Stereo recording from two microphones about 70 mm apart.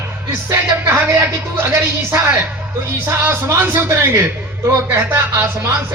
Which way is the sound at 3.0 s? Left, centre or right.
Right.